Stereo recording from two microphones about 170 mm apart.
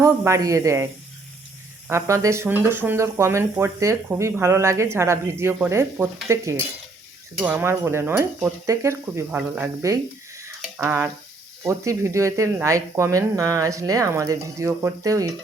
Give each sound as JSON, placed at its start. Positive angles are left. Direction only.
{"t": 0.0, "sound": "speech", "side_deg": -20}
{"t": 1.9, "sound": "speech", "side_deg": -15}